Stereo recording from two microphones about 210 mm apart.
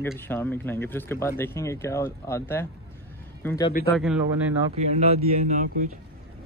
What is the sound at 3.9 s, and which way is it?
Speech, 5° right (ahead or behind).